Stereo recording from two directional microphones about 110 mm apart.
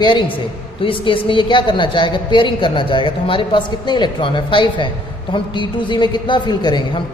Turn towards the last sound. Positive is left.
turn(degrees=40)  # may be behind; listen again after turning